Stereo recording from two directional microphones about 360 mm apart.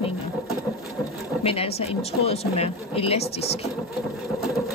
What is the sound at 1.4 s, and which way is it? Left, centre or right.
Speech, centre.